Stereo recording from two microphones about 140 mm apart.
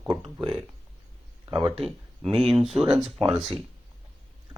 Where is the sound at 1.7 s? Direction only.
Centre (ahead or behind).